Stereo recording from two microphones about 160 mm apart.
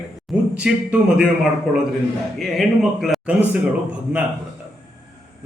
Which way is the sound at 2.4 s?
Centre (ahead or behind).